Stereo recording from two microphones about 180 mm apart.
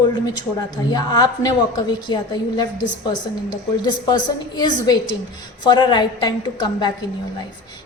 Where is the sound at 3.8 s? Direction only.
25° left (ahead or behind).